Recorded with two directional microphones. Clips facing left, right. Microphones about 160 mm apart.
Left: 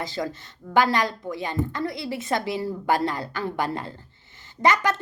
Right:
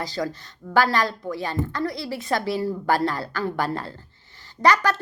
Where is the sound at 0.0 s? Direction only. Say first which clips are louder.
Right 1 dB; 20° left (ahead or behind).